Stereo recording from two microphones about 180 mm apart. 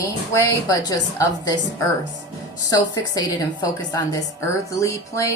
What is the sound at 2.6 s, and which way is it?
A woman's voice, 20° left (ahead or behind).